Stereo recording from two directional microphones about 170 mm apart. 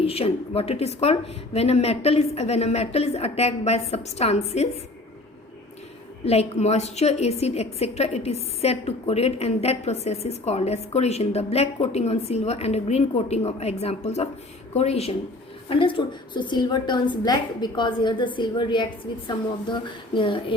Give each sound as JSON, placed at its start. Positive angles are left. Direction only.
{"t": 0.0, "sound": "a woman's voice", "side_deg": 35}
{"t": 6.2, "sound": "a woman's voice", "side_deg": 40}